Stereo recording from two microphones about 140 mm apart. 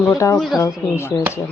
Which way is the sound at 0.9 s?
15° left (ahead or behind).